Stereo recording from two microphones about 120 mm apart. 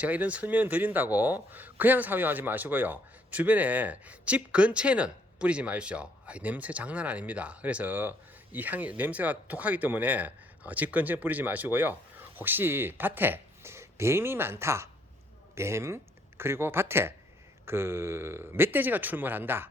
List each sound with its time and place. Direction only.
0.0 s a man's voice: 10° right (ahead or behind)